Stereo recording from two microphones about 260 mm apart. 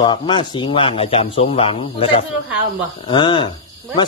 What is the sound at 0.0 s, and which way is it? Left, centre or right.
Speech, centre.